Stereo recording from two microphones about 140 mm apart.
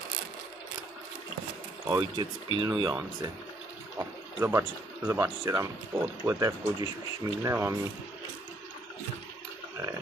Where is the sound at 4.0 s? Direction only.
20° right (ahead or behind).